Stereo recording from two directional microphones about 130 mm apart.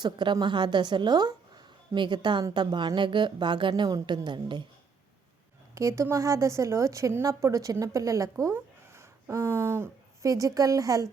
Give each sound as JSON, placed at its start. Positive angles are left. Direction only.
{"t": 0.0, "sound": "a woman's voice", "side_deg": -35}
{"t": 5.7, "sound": "a woman's voice", "side_deg": -20}